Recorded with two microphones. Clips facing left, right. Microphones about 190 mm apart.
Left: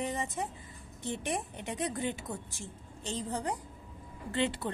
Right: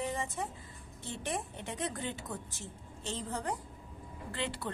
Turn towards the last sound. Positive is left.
turn(degrees=20)  # may be behind; listen again after turning